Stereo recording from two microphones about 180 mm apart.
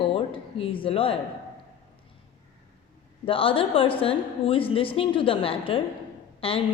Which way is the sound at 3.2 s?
30° left (ahead or behind).